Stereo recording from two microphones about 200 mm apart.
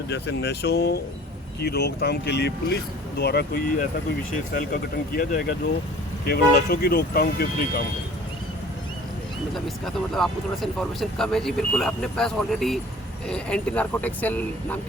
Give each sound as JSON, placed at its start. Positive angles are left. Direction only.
{"t": 0.1, "sound": "speech", "side_deg": 60}
{"t": 9.6, "sound": "speech", "side_deg": 0}